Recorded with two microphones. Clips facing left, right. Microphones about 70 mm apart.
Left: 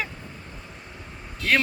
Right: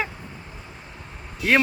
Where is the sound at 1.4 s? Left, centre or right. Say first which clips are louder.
Right 3 dB; centre.